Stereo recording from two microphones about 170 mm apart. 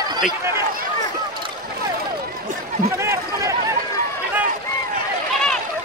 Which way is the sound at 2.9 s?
15° right (ahead or behind).